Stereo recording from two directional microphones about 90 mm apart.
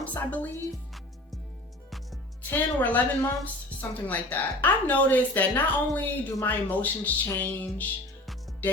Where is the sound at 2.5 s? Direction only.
20° left (ahead or behind).